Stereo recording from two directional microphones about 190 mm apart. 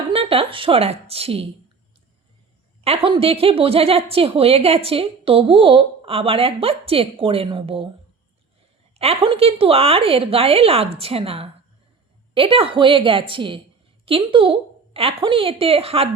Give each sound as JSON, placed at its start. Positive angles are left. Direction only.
{"t": 0.1, "sound": "speech", "side_deg": -30}
{"t": 2.8, "sound": "a woman's voice", "side_deg": -30}
{"t": 9.0, "sound": "a woman's voice", "side_deg": -30}